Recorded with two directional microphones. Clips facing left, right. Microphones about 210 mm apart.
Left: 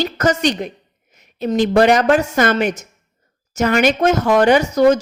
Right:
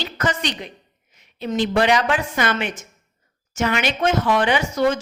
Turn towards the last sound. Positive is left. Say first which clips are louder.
# left 7 dB
turn(degrees=40)  # may be behind; listen again after turning